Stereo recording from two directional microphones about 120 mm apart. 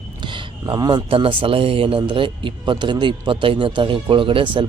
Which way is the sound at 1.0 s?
50° right (ahead or behind).